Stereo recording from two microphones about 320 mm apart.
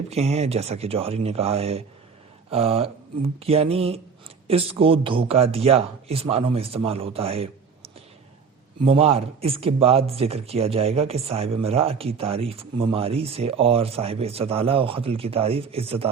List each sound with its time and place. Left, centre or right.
0.1 s speech: centre